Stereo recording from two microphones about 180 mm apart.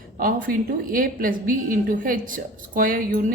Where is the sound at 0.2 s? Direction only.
50° right (ahead or behind).